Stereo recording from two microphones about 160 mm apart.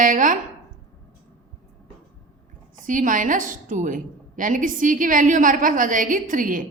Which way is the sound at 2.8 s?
55° right (ahead or behind).